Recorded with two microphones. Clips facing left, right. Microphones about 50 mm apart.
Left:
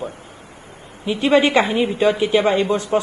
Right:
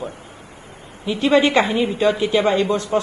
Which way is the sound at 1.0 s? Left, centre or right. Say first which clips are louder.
Even; centre.